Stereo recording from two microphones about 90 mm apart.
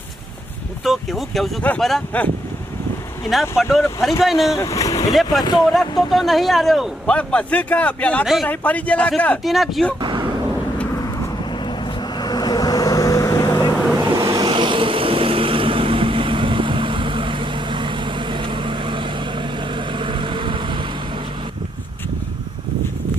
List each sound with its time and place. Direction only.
0.9 s speech: centre (ahead or behind)
1.7 s speech: 15° left (ahead or behind)
3.6 s speech: centre (ahead or behind)
4.5 s speech: 35° left (ahead or behind)
6.1 s speech: centre (ahead or behind)
7.1 s speech: 15° left (ahead or behind)
8.2 s speech: 5° right (ahead or behind)
8.4 s speech: 15° left (ahead or behind)
9.4 s speech: centre (ahead or behind)
10.0 s a sound: 65° right (ahead or behind)
12.2 s vehicle: 50° left (ahead or behind)
14.0 s vehicle: 50° right (ahead or behind)